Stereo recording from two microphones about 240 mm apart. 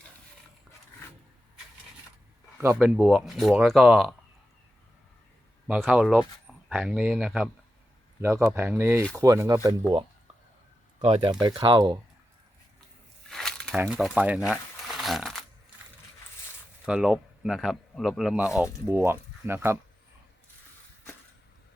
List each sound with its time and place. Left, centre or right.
2.6 s speech: centre
5.6 s speech: centre
11.0 s speech: right
13.3 s crumpling: centre
16.8 s speech: centre